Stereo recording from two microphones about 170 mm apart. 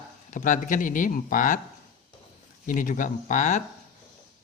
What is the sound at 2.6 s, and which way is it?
Speech, 50° left (ahead or behind).